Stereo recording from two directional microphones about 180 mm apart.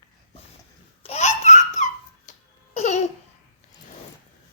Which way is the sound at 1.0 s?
40° left (ahead or behind).